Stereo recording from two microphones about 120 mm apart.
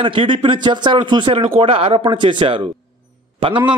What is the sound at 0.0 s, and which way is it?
A man's voice, 45° right (ahead or behind).